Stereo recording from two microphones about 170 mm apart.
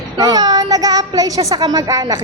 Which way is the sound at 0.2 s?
25° right (ahead or behind).